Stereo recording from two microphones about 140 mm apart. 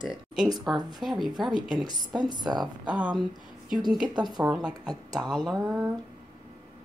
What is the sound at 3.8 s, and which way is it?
A woman's voice, 30° right (ahead or behind).